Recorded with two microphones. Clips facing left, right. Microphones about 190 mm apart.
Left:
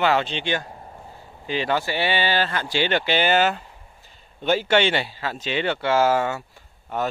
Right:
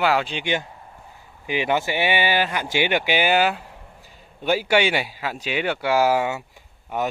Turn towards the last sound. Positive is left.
turn(degrees=-15)  # may be behind; listen again after turning